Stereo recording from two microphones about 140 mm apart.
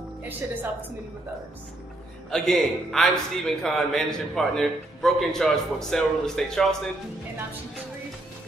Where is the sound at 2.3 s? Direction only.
5° left (ahead or behind).